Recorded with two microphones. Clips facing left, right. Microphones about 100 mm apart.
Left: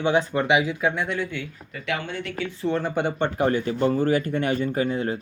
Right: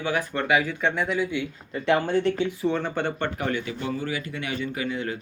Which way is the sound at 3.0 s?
15° left (ahead or behind).